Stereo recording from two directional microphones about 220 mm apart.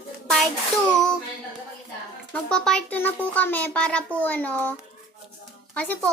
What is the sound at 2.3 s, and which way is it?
A child's voice, 5° left (ahead or behind).